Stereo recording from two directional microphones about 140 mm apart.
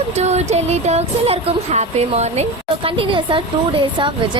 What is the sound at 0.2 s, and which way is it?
Speech, 50° right (ahead or behind).